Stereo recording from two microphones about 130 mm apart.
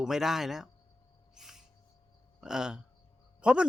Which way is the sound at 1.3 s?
5° right (ahead or behind).